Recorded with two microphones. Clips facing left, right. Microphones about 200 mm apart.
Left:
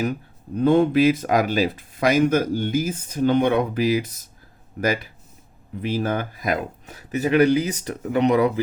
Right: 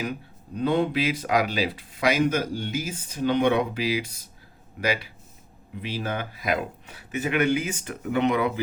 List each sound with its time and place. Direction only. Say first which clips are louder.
0.0 s speech: left 6 dB; 45° left (ahead or behind)